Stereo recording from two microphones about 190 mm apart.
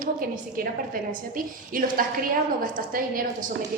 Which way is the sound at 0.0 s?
50° right (ahead or behind).